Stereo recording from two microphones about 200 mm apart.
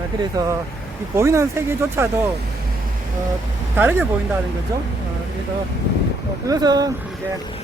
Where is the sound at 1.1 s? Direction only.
15° right (ahead or behind).